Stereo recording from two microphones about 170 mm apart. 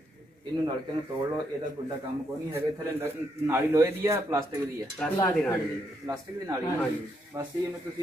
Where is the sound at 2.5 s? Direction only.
15° right (ahead or behind).